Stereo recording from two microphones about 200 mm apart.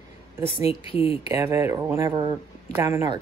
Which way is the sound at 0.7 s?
30° left (ahead or behind).